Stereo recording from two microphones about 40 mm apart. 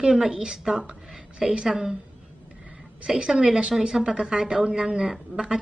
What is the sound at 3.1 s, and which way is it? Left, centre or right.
A woman's voice, right.